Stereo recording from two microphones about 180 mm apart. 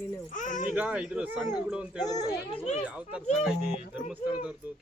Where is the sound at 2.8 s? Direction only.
5° right (ahead or behind).